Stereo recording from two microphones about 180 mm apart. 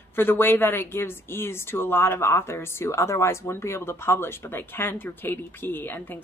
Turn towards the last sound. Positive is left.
turn(degrees=10)  # may be behind; listen again after turning